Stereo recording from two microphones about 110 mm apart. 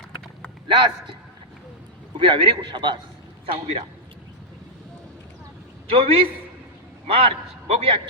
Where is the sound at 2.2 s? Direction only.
50° right (ahead or behind).